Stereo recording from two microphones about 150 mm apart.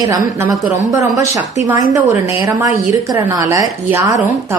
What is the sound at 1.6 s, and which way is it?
A woman's voice, 20° right (ahead or behind).